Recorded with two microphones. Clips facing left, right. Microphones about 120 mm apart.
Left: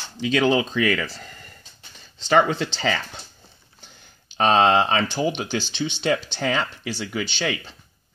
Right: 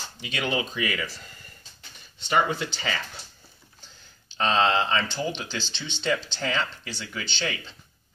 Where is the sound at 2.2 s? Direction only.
90° left.